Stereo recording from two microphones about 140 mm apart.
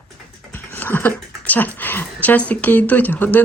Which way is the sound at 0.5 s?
15° left (ahead or behind).